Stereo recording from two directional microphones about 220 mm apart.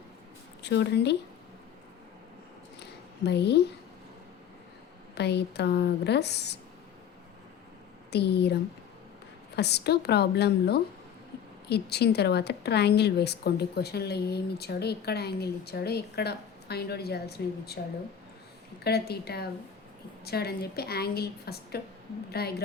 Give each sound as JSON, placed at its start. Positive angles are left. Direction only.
{"t": 0.6, "sound": "speech", "side_deg": 50}
{"t": 3.2, "sound": "a woman's voice", "side_deg": 50}
{"t": 5.1, "sound": "a woman's voice", "side_deg": 50}
{"t": 8.1, "sound": "a woman's voice", "side_deg": 50}
{"t": 9.6, "sound": "a woman's voice", "side_deg": 50}
{"t": 18.8, "sound": "a woman's voice", "side_deg": 45}